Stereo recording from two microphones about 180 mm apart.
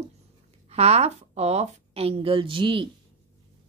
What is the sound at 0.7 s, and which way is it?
Speech, 35° right (ahead or behind).